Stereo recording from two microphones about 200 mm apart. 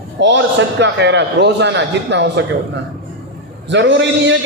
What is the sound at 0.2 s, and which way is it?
A man's voice, 65° right (ahead or behind).